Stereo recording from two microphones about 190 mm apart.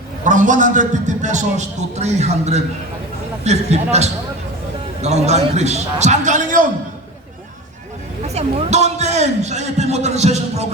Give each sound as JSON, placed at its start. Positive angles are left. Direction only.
{"t": 0.3, "sound": "a man's voice", "side_deg": -40}
{"t": 8.3, "sound": "a man's voice", "side_deg": -35}